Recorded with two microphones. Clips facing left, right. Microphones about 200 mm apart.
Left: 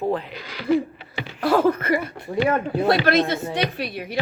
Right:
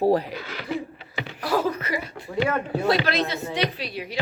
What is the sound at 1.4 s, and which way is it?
A woman's voice, 55° left (ahead or behind).